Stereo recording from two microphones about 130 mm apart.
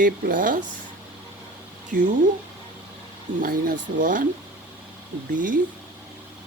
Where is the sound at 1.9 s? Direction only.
90° right.